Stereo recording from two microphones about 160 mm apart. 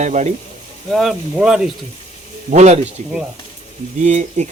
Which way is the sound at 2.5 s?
45° right (ahead or behind).